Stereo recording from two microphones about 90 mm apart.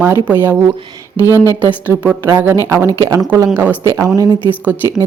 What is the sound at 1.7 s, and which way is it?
Speech, 15° right (ahead or behind).